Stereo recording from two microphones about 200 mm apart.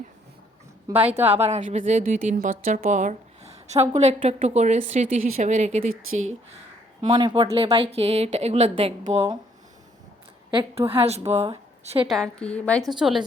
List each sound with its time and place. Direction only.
0.9 s speech: 10° right (ahead or behind)
1.5 s speech: 35° right (ahead or behind)
5.9 s speech: 90° right
7.1 s speech: 20° right (ahead or behind)
10.5 s speech: 25° right (ahead or behind)
12.0 s a woman's voice: centre (ahead or behind)